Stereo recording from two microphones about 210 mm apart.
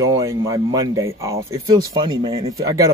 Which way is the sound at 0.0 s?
15° right (ahead or behind).